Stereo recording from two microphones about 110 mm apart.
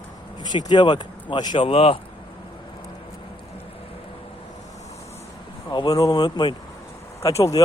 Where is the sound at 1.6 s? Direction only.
55° left (ahead or behind).